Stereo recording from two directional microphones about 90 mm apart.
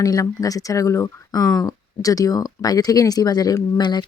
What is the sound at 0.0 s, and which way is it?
Speech, 40° left (ahead or behind).